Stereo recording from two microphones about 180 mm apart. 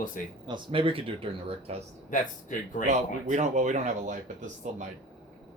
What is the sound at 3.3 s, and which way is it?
Speech, 40° right (ahead or behind).